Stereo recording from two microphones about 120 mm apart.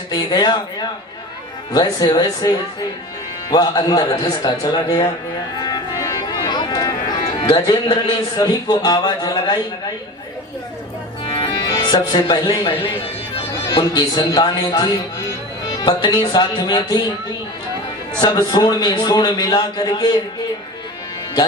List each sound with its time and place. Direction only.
0.1 s speech: 35° left (ahead or behind)
5.5 s music: 35° left (ahead or behind)
7.4 s speech: 35° left (ahead or behind)
11.3 s music: 40° left (ahead or behind)
13.7 s speech: 30° left (ahead or behind)
18.2 s speech: 35° left (ahead or behind)